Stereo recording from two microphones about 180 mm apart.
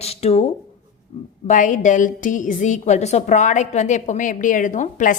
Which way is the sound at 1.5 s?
45° left (ahead or behind).